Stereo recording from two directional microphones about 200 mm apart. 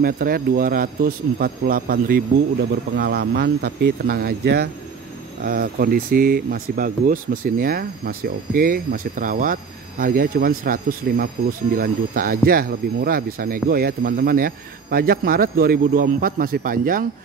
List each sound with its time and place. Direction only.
0.0 s speech: 45° right (ahead or behind)